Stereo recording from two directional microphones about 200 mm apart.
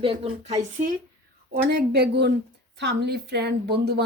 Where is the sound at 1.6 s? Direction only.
50° right (ahead or behind).